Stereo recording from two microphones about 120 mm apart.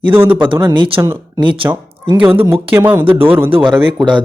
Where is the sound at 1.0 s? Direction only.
30° right (ahead or behind).